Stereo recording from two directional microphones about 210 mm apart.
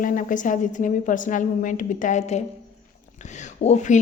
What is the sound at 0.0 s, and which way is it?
A woman's voice, 40° left (ahead or behind).